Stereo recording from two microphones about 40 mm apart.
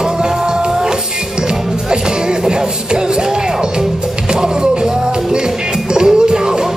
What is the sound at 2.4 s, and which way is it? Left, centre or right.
Music, right.